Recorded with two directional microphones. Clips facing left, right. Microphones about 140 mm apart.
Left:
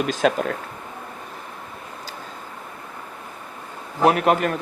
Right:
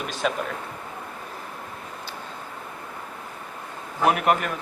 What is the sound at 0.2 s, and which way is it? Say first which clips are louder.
Speech: left 4 dB; 70° left (ahead or behind).